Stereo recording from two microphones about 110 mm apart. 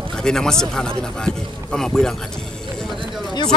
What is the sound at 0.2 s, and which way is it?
Speech, 5° left (ahead or behind).